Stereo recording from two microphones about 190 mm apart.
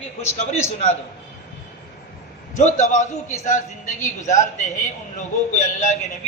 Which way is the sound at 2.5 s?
40° left (ahead or behind).